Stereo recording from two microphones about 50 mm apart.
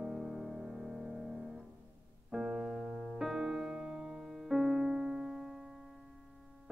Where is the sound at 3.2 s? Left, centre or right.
Centre.